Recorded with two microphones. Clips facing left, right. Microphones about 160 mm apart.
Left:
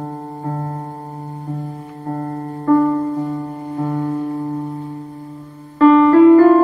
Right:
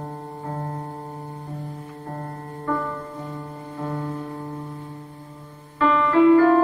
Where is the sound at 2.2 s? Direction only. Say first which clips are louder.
Left 12 dB; 35° left (ahead or behind).